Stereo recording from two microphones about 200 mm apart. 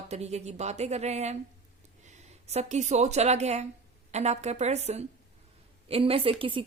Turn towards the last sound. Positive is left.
turn(degrees=-25)  # may be behind; listen again after turning